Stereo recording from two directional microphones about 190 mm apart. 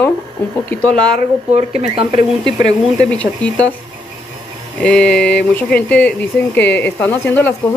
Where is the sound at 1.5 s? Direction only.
30° right (ahead or behind).